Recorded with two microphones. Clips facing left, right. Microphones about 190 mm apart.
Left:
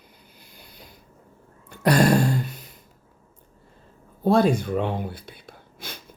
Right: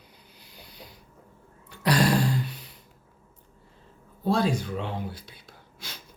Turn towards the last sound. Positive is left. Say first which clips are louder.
# left 5 dB
turn(degrees=55)  # may be behind; listen again after turning